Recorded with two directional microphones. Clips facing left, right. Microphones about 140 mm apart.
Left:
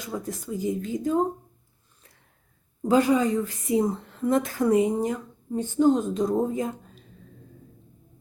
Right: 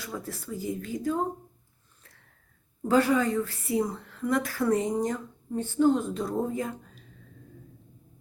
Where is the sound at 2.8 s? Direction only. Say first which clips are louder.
Left 3 dB; 15° left (ahead or behind).